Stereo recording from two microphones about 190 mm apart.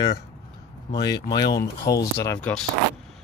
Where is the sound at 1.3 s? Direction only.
20° left (ahead or behind).